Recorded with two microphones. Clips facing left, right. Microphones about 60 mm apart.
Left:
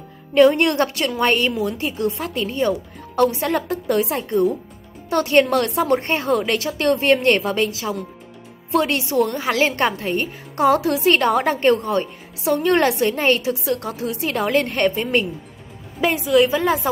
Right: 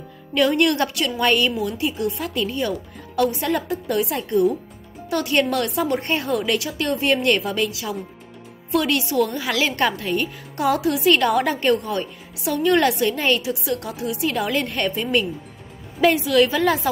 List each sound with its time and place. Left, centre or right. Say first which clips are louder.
0.3 s a woman's voice: left 4 dB; left
16.0 s a woman's voice: even; centre